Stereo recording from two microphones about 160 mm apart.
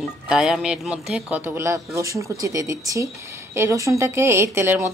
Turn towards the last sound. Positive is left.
turn(degrees=-15)  # may be behind; listen again after turning